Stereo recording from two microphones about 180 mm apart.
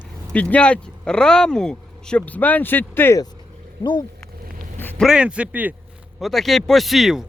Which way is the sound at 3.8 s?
25° left (ahead or behind).